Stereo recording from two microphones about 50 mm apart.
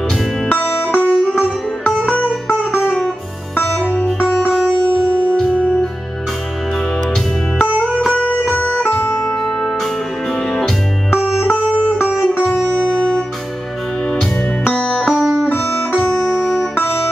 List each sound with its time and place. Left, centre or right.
0.5 s music: left
3.7 s music: centre
5.6 s music: left
8.1 s music: left
8.8 s music: left
9.2 s music: centre
11.1 s music: centre
12.8 s music: centre
14.6 s music: left
15.0 s music: centre
16.3 s music: centre
16.7 s music: left